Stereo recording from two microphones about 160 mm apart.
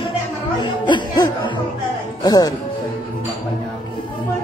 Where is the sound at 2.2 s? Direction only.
25° left (ahead or behind).